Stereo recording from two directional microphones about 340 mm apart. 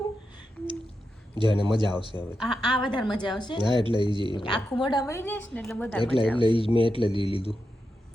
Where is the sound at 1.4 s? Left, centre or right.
Centre.